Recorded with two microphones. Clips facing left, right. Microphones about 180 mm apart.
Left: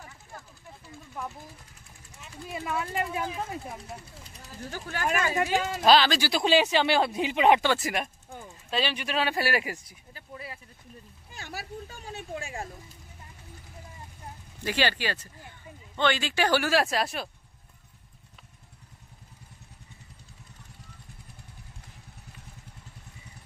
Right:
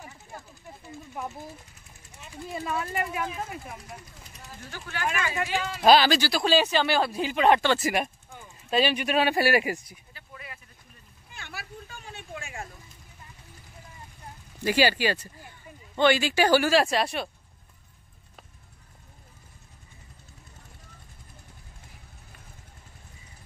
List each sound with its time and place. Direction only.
0.0 s a sound: 15° right (ahead or behind)
2.8 s speech: 25° left (ahead or behind); by 5.8 s 45° left (ahead or behind)
5.9 s speech: 5° right (ahead or behind)
6.2 s speech: 20° left (ahead or behind)
7.7 s speech: 5° right (ahead or behind)
10.3 s a sound: 30° left (ahead or behind)
11.3 s vehicle: 40° left (ahead or behind)
14.6 s speech: 10° right (ahead or behind)